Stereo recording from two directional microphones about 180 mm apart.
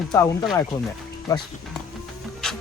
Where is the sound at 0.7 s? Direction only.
20° left (ahead or behind).